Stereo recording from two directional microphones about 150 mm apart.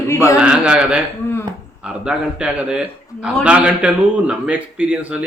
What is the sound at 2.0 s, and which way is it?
A man's voice, 5° right (ahead or behind).